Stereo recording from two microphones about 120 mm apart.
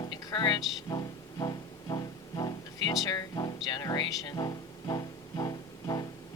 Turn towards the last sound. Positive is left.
turn(degrees=35)  # may be behind; listen again after turning